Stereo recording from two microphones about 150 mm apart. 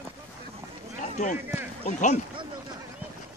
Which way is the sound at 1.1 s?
55° left (ahead or behind).